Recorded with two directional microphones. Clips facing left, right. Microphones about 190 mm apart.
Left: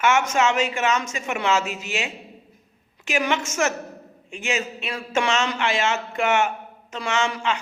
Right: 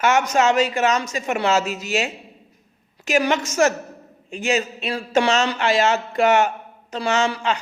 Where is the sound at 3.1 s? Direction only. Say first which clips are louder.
Right 4 dB; 40° right (ahead or behind).